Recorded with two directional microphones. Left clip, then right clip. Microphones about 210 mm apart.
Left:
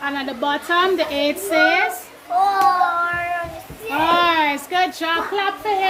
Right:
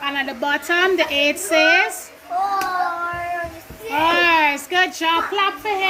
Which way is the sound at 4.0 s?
Centre (ahead or behind).